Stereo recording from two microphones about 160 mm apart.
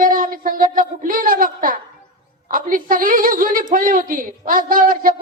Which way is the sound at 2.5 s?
60° right (ahead or behind).